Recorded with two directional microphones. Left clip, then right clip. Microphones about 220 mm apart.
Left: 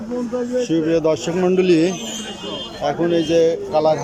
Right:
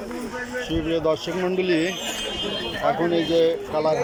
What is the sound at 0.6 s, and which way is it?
Speech, 15° left (ahead or behind).